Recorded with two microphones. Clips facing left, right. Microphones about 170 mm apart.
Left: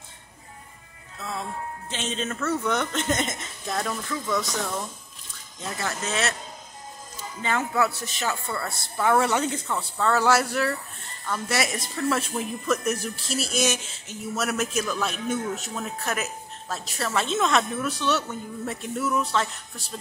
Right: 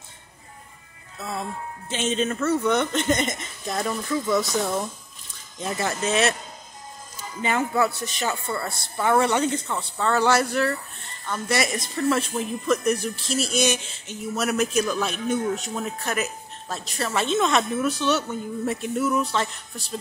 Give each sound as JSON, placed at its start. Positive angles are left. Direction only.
{"t": 1.9, "sound": "speech", "side_deg": -5}
{"t": 3.7, "sound": "speech", "side_deg": -10}
{"t": 5.6, "sound": "speech", "side_deg": -20}
{"t": 7.4, "sound": "speech", "side_deg": -5}